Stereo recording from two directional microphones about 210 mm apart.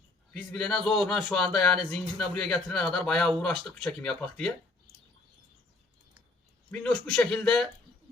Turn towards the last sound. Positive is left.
turn(degrees=5)  # may be behind; listen again after turning